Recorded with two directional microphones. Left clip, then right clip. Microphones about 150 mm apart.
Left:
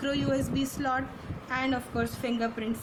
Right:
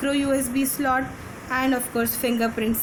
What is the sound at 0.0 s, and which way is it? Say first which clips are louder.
A woman's voice: right 6 dB; 20° right (ahead or behind).